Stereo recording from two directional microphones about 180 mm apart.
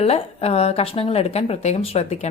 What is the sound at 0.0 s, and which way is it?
A woman's voice, 35° left (ahead or behind).